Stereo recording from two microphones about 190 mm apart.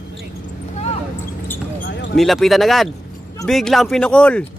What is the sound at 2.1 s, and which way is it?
Speech, centre (ahead or behind).